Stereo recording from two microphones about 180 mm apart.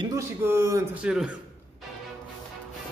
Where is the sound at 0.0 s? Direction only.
15° right (ahead or behind).